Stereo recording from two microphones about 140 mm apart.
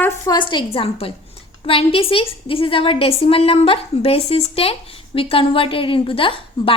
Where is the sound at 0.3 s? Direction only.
35° left (ahead or behind).